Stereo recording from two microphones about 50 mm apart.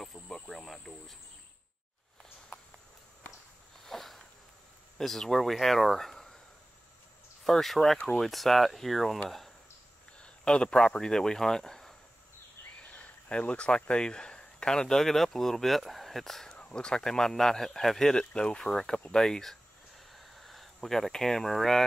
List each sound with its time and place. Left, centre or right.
0.0 s cricket: centre
3.8 s a sound: centre
4.9 s speech: centre
7.4 s speech: centre
10.1 s a sound: left
10.8 s speech: centre
12.9 s speech: left; by 16.5 s centre
16.5 s speech: centre
20.1 s a sound: centre